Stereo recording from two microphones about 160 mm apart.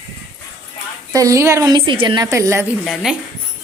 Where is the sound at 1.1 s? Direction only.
20° right (ahead or behind).